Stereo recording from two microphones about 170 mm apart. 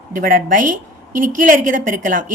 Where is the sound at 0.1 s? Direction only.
55° right (ahead or behind).